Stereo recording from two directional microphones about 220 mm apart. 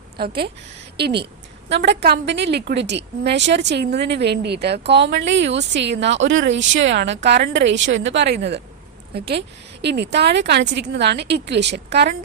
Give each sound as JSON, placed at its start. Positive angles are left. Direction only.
{"t": 0.2, "sound": "speech", "side_deg": -45}